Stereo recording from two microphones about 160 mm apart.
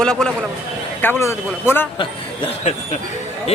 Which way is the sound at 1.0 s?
20° left (ahead or behind).